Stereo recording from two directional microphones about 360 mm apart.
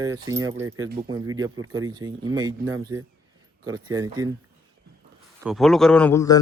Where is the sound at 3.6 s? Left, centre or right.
Centre.